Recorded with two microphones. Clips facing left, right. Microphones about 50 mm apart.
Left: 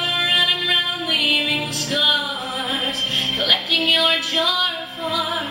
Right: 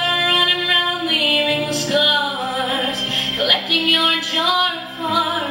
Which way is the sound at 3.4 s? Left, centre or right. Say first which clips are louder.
Right 2 dB; centre.